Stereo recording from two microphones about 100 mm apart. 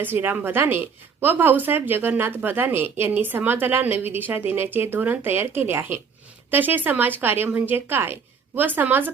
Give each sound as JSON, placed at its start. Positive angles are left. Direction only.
{"t": 0.0, "sound": "a woman's voice", "side_deg": -20}